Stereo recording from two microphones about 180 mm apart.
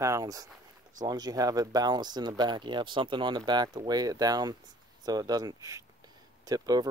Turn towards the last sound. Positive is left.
turn(degrees=-20)  # may be behind; listen again after turning